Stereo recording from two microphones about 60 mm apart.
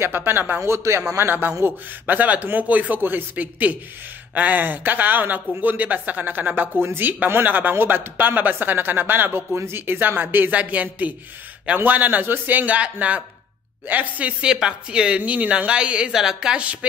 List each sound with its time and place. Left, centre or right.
0.0 s a man's voice: right
0.6 s a man's voice: right
1.6 s a man's voice: right; by 16.7 s centre